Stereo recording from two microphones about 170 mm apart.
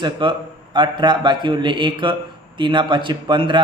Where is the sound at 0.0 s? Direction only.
25° right (ahead or behind).